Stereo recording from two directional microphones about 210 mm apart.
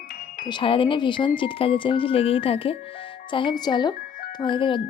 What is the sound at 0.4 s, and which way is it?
Speech, 25° left (ahead or behind).